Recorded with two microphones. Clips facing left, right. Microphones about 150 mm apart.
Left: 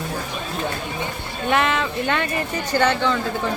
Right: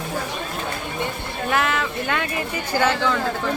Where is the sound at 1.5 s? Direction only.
Centre (ahead or behind).